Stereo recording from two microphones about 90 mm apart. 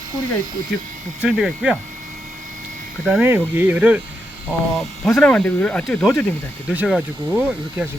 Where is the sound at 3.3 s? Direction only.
25° right (ahead or behind).